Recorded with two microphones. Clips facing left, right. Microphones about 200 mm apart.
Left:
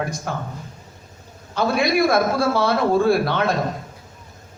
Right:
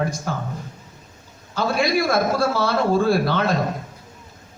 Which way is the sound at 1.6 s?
55° left (ahead or behind).